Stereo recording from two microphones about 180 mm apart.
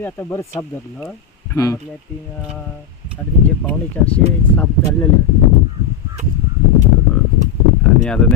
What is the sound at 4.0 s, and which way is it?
Speech, 10° left (ahead or behind).